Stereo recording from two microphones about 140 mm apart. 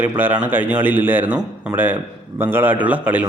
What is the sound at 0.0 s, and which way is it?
Speech, 15° right (ahead or behind).